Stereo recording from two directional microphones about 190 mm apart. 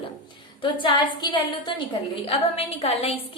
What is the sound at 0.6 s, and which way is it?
A woman's voice, 25° left (ahead or behind).